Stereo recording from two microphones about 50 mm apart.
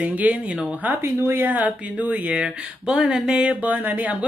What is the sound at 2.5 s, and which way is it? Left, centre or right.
Speech, centre.